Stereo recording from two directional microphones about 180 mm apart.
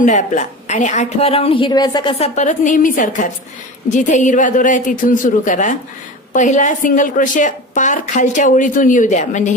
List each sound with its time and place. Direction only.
0.0 s a woman's voice: 45° left (ahead or behind)